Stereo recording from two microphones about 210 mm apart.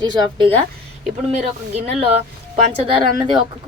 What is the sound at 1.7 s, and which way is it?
Speech, 30° right (ahead or behind).